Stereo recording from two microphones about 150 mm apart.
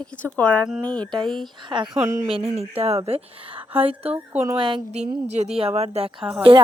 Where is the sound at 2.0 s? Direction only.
20° right (ahead or behind).